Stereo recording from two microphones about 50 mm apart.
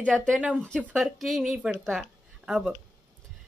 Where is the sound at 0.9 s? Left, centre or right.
Centre.